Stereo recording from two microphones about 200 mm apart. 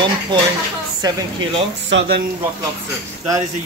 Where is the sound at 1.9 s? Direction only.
65° right (ahead or behind).